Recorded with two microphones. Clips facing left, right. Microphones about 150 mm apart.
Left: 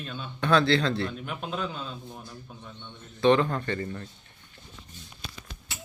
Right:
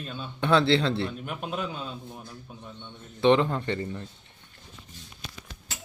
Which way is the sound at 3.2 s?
20° right (ahead or behind).